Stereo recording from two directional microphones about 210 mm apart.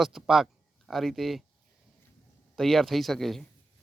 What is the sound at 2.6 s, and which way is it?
Speech, centre (ahead or behind).